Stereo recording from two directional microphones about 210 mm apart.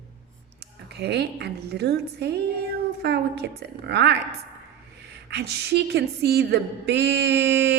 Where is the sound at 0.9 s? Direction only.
50° right (ahead or behind).